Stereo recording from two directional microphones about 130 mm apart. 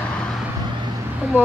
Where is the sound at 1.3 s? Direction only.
15° right (ahead or behind).